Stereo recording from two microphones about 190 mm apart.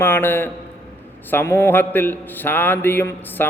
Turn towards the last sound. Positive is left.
turn(degrees=10)  # may be behind; listen again after turning